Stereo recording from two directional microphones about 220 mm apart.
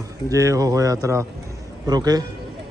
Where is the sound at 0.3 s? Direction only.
15° right (ahead or behind).